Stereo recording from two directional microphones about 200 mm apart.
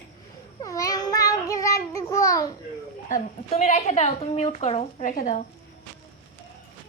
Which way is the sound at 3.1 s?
35° left (ahead or behind).